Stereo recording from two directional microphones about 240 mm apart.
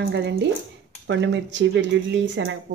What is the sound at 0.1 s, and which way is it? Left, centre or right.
Speech, right.